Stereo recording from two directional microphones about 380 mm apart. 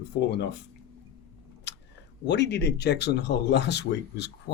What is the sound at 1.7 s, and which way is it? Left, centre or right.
Chewing, left.